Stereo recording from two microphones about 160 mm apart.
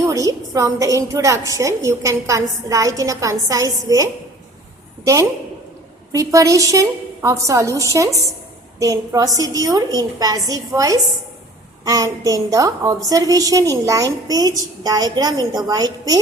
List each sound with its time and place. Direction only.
0.0 s a woman's voice: 20° right (ahead or behind)